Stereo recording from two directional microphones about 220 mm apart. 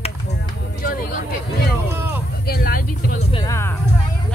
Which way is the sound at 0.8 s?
40° left (ahead or behind).